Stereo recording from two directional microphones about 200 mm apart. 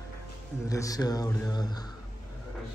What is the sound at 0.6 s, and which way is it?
Speech, 15° left (ahead or behind).